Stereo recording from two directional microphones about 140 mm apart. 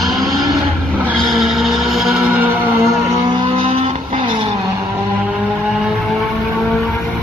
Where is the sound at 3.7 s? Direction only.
50° right (ahead or behind); by 4.4 s 35° right (ahead or behind).